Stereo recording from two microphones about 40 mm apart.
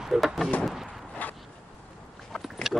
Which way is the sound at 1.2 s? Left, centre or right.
Left.